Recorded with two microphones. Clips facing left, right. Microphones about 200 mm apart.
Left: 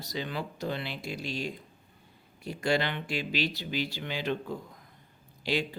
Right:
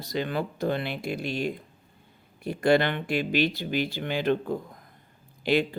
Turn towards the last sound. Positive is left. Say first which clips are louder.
# right 7 dB
turn(degrees=-55)  # may be behind; listen again after turning